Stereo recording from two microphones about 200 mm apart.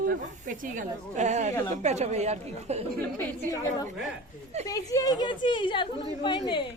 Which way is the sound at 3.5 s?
15° left (ahead or behind).